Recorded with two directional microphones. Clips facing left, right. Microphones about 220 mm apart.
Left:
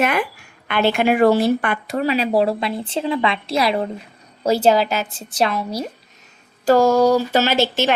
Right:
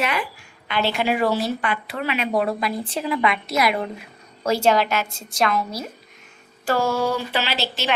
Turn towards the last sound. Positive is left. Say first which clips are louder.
# left 8 dB
turn(degrees=50)  # may be behind; listen again after turning